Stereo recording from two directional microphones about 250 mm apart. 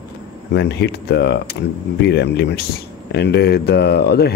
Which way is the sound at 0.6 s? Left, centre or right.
Left.